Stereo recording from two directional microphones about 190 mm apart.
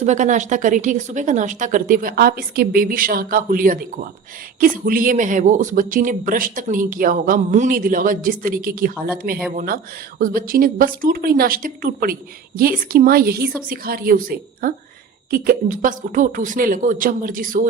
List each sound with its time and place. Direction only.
0.0 s speech: 40° right (ahead or behind)